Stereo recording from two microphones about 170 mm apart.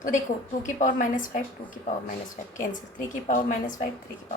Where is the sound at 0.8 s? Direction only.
50° left (ahead or behind).